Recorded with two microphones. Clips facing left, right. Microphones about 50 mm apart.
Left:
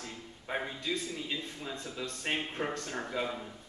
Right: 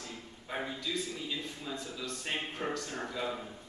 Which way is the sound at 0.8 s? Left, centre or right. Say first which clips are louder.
Left 1 dB; left.